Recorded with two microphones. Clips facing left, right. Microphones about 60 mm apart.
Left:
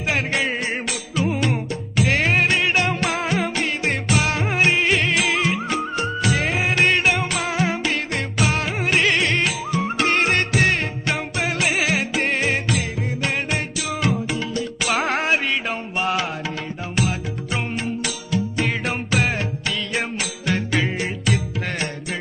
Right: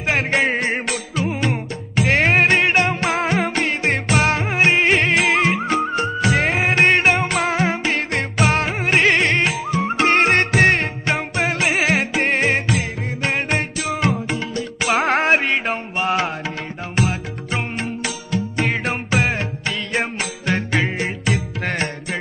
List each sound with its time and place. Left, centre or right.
0.0 s music: right
1.2 s music: right
4.4 s music: right
21.6 s music: right